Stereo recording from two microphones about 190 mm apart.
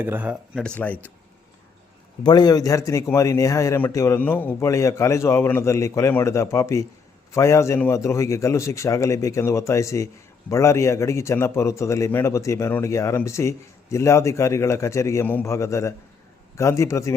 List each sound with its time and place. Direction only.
0.0 s speech: 10° right (ahead or behind)
0.6 s a man's voice: 5° left (ahead or behind)
2.2 s a man's voice: 20° left (ahead or behind)